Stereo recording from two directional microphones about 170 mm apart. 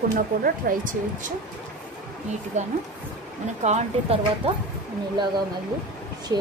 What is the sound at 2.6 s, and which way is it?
Speech, 45° right (ahead or behind).